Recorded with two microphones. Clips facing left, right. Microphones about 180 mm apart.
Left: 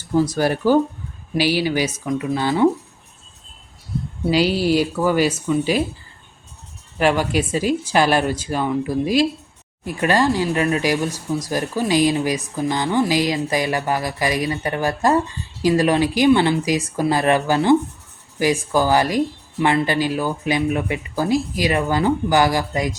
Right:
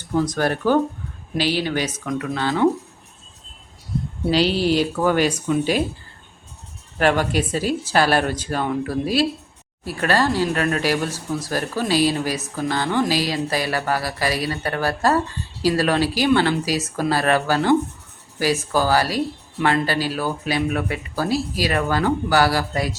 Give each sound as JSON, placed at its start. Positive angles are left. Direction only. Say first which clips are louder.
{"t": 0.1, "sound": "a woman's voice", "louder": "left 2 dB", "side_deg": 10}
{"t": 4.3, "sound": "a woman's voice", "louder": "left 1 dB", "side_deg": 10}
{"t": 7.0, "sound": "a woman's voice", "louder": "left 1 dB", "side_deg": 10}